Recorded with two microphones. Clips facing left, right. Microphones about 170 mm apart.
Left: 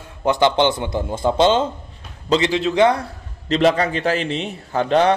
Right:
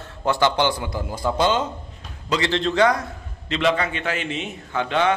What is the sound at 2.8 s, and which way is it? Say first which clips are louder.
A man's voice: left 4 dB; 30° left (ahead or behind).